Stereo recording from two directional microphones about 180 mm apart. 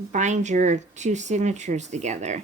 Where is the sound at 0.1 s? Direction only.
40° right (ahead or behind).